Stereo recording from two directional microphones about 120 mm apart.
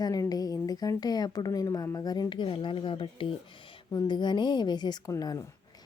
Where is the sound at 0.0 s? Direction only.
30° left (ahead or behind).